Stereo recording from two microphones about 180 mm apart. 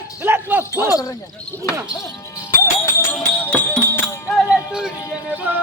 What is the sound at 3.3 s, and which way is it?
Music, 10° left (ahead or behind).